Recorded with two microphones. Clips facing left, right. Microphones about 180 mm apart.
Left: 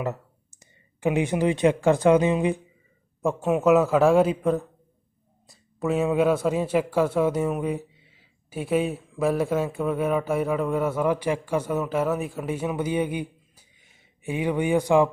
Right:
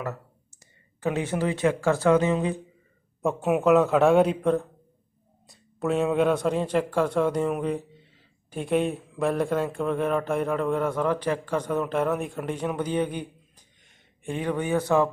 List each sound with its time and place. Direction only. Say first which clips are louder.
0.6 s speech: left 3 dB; 15° left (ahead or behind)
3.2 s a man's voice: left 1 dB; centre (ahead or behind); by 15.1 s 15° left (ahead or behind)